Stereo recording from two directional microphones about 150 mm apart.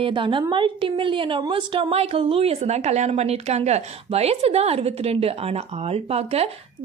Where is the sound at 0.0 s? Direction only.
35° right (ahead or behind).